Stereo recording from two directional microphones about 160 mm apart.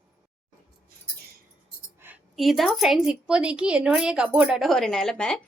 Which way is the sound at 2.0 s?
15° right (ahead or behind).